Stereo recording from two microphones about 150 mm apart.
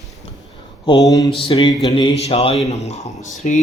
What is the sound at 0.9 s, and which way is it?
Mantra, 25° left (ahead or behind).